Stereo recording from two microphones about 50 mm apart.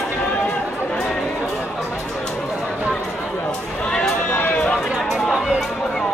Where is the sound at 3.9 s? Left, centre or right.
Centre.